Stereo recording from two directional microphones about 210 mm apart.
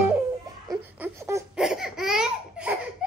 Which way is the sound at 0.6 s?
10° right (ahead or behind).